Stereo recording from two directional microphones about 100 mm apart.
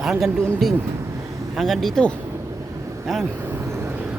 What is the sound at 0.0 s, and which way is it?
Speech, 5° right (ahead or behind).